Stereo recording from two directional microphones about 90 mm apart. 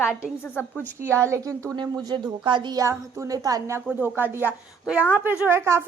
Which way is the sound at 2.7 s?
35° right (ahead or behind).